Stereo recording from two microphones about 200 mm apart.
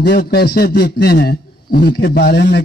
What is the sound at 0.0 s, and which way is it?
A man's voice, 55° left (ahead or behind).